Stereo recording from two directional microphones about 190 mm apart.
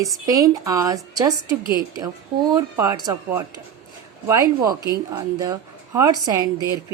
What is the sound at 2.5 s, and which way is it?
A woman's voice, 20° right (ahead or behind).